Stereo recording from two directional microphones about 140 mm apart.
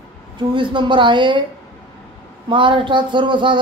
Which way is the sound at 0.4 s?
35° right (ahead or behind).